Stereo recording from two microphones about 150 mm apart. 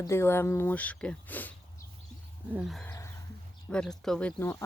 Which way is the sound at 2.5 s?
5° right (ahead or behind).